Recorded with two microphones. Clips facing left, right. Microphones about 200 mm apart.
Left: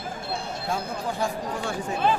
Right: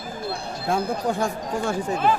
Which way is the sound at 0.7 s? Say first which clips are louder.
Right 6 dB; 55° right (ahead or behind).